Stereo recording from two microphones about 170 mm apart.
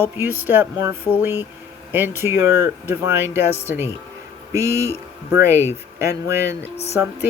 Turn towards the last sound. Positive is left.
turn(degrees=-15)  # may be behind; listen again after turning